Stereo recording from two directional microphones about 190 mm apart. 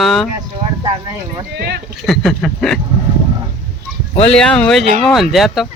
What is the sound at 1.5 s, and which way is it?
Speech, 55° right (ahead or behind).